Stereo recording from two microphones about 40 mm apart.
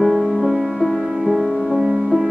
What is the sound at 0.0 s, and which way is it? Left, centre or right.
Music, centre.